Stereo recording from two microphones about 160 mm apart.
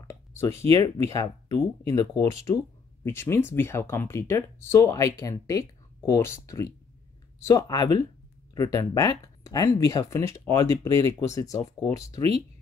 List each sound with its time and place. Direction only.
0.0 s speech: 15° left (ahead or behind)
12.2 s speech: 40° right (ahead or behind)